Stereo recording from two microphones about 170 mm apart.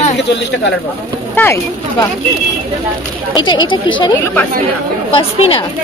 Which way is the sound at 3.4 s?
25° left (ahead or behind).